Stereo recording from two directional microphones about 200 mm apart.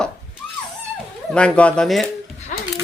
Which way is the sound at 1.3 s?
5° left (ahead or behind).